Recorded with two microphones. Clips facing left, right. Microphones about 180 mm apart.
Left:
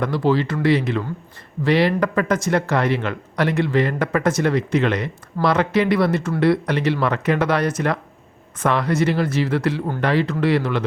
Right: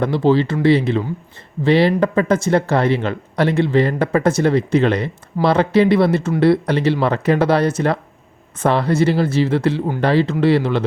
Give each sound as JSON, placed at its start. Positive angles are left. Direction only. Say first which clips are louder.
{"t": 0.0, "sound": "speech", "louder": "right 4 dB", "side_deg": -25}